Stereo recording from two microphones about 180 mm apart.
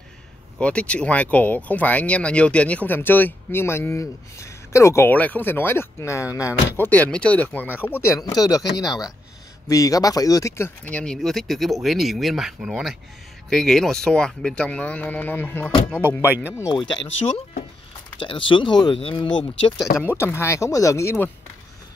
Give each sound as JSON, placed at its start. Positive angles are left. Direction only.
{"t": 0.6, "sound": "speech", "side_deg": 5}
{"t": 16.3, "sound": "speech", "side_deg": -10}
{"t": 16.7, "sound": "speech", "side_deg": 25}
{"t": 20.0, "sound": "speech", "side_deg": 15}